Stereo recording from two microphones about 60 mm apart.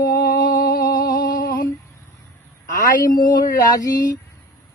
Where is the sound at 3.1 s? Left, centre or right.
Left.